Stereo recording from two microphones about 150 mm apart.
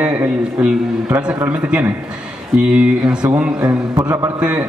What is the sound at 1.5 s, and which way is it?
A man's voice, 10° right (ahead or behind).